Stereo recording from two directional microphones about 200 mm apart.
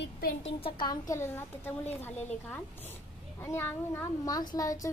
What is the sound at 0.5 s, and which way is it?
A woman's voice, 25° left (ahead or behind).